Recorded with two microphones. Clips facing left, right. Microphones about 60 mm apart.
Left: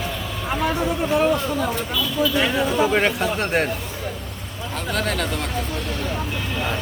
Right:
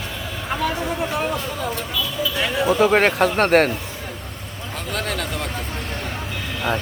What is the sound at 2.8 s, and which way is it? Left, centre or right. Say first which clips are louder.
Speech: right 6 dB; right.